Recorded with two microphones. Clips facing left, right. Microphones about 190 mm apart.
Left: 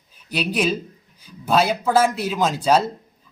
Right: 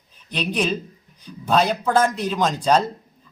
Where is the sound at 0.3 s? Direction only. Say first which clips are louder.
Left 1 dB; 5° left (ahead or behind).